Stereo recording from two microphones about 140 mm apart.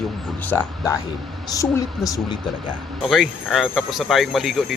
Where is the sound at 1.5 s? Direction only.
25° left (ahead or behind).